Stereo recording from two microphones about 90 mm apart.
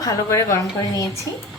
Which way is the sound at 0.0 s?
35° left (ahead or behind).